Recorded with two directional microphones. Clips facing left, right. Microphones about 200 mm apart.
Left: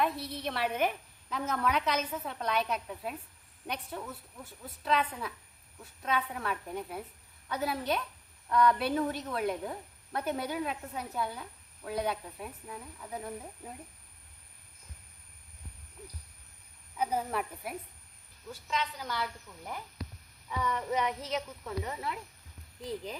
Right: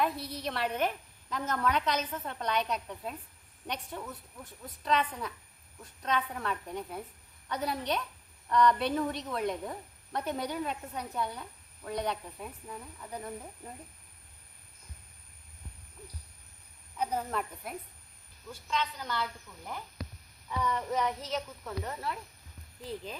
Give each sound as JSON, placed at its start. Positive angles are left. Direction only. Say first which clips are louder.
{"t": 0.0, "sound": "a woman's voice", "louder": "even", "side_deg": 0}
{"t": 17.0, "sound": "child singing", "louder": "left 1 dB", "side_deg": 10}
{"t": 18.7, "sound": "a woman's voice", "louder": "right 1 dB", "side_deg": 5}
{"t": 20.5, "sound": "child singing", "louder": "even", "side_deg": 10}